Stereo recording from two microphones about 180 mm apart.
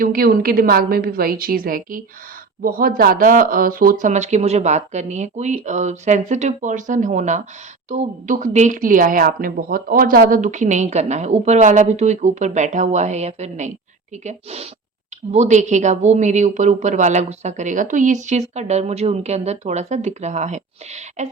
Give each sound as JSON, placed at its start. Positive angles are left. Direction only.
{"t": 0.0, "sound": "a woman's voice", "side_deg": -55}